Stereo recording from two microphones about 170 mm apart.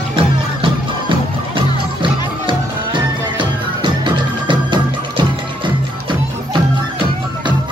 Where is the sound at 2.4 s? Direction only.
30° right (ahead or behind).